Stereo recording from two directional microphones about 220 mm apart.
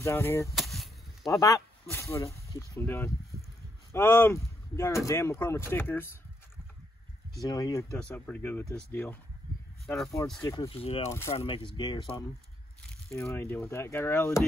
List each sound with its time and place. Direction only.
0.0 s speech: 10° left (ahead or behind)
0.6 s chop: centre (ahead or behind)
1.5 s speech: 10° left (ahead or behind)
7.4 s speech: 15° left (ahead or behind); by 10.1 s centre (ahead or behind)
10.4 s speech: 15° left (ahead or behind)
10.7 s speech: 25° left (ahead or behind)
11.1 s speech: 10° left (ahead or behind)
11.3 s speech: 25° left (ahead or behind)
13.2 s speech: 10° left (ahead or behind)